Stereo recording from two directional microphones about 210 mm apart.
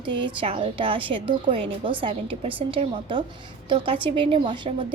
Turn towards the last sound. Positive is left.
turn(degrees=-20)  # may be behind; listen again after turning